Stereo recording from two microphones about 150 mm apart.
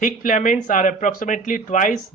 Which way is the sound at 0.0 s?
60° left (ahead or behind).